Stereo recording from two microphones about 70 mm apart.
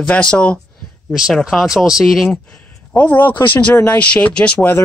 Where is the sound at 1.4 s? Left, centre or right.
Centre.